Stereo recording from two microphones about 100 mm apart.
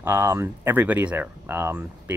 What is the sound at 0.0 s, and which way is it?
Speech, 20° right (ahead or behind).